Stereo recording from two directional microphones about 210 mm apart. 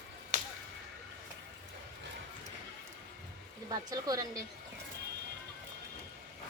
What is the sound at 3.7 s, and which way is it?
Speech, 20° right (ahead or behind).